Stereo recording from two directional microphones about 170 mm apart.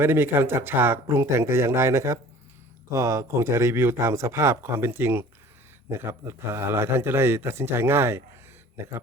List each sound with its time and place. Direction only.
0.0 s speech: 15° right (ahead or behind)